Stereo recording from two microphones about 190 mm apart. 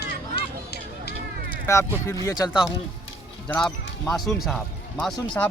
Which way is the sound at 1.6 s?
15° left (ahead or behind).